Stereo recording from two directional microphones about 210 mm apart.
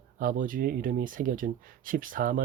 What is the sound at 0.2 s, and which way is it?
Speech, 40° right (ahead or behind).